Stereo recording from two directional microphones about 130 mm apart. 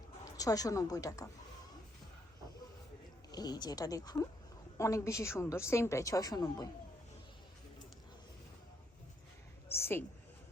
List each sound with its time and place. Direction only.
0.3 s a woman's voice: 25° left (ahead or behind)
3.3 s a woman's voice: 30° left (ahead or behind)
9.6 s speech: 20° left (ahead or behind)